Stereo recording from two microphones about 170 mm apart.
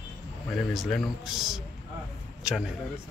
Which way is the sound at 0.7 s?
Centre (ahead or behind).